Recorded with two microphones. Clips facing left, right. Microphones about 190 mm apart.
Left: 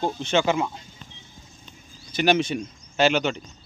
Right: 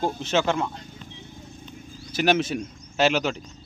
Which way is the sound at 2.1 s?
5° right (ahead or behind).